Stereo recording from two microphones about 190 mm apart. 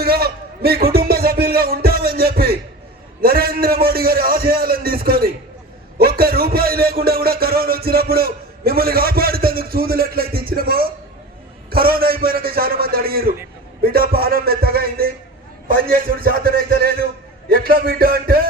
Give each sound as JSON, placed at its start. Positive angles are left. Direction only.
{"t": 0.0, "sound": "music", "side_deg": -55}
{"t": 3.2, "sound": "a man's voice", "side_deg": -50}